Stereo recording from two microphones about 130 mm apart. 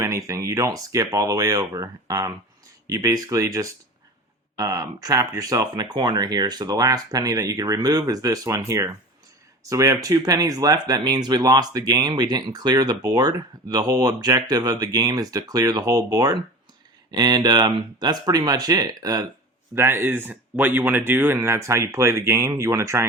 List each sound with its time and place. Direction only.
0.0 s speech: 25° right (ahead or behind)